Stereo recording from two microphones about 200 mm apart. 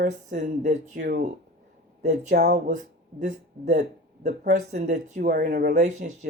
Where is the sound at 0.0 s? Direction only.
35° right (ahead or behind).